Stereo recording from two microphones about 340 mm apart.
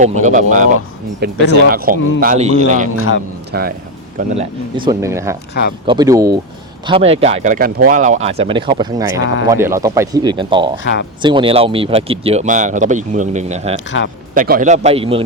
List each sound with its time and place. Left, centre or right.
0.0 s a man's voice: right
2.9 s a man's voice: left
3.5 s a man's voice: right
4.4 s speech: centre
14.0 s a man's voice: left
14.3 s a man's voice: right